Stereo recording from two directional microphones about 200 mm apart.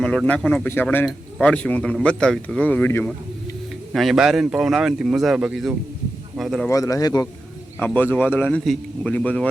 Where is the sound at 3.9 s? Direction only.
Centre (ahead or behind).